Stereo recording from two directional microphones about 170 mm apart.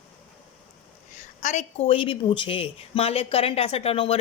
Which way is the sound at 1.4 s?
45° left (ahead or behind).